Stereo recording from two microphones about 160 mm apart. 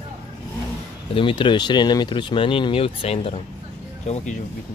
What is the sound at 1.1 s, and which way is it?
Speech, 30° left (ahead or behind).